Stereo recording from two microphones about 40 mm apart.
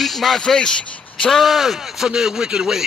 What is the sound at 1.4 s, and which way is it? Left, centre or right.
Speech, centre.